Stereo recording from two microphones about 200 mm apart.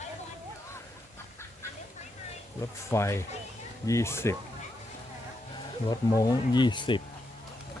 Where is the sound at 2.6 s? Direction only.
15° left (ahead or behind).